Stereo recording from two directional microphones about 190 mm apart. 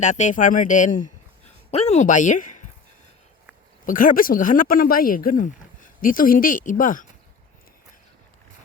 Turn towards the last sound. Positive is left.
turn(degrees=45)  # may be behind; listen again after turning